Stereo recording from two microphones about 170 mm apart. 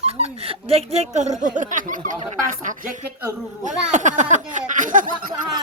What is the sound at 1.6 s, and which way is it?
Speech, 50° right (ahead or behind).